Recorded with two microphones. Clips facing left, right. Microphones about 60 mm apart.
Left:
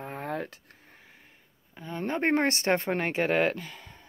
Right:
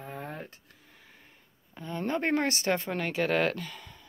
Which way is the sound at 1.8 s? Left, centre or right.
Centre.